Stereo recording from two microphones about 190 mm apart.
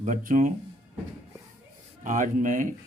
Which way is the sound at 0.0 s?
40° right (ahead or behind).